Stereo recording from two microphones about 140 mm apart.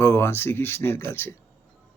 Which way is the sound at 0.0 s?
15° left (ahead or behind).